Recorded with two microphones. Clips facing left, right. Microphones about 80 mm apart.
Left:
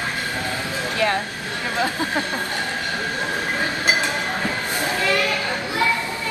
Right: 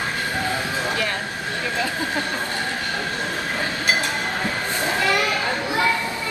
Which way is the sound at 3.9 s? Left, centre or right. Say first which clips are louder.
Left 1 dB; centre.